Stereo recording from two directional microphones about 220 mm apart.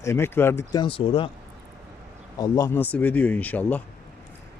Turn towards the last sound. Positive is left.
turn(degrees=5)  # may be behind; listen again after turning